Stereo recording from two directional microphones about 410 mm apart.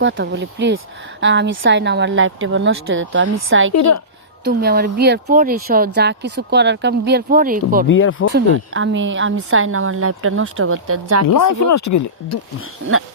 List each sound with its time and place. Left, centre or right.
0.0 s speech: right
3.8 s a woman's voice: left
4.4 s speech: right
7.9 s speech: left
8.5 s a woman's voice: right
11.3 s speech: left